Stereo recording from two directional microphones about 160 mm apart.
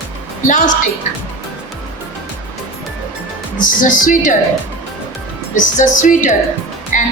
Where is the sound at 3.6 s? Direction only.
55° left (ahead or behind).